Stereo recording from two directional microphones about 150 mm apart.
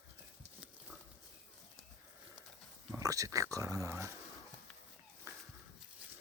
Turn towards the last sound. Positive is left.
turn(degrees=-20)  # may be behind; listen again after turning